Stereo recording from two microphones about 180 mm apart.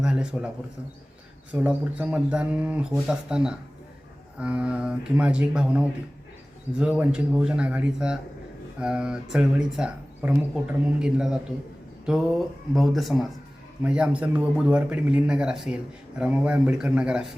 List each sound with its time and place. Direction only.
0.0 s speech: 5° right (ahead or behind)
1.5 s a man's voice: 10° right (ahead or behind)